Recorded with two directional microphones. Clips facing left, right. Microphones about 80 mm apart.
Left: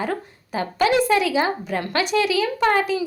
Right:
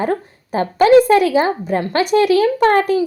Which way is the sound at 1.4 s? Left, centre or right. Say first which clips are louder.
Right 6 dB; right.